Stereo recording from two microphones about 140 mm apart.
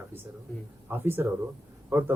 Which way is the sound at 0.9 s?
15° right (ahead or behind).